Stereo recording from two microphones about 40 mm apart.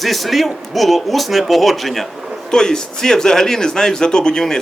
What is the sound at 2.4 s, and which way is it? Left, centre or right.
A man's voice, centre.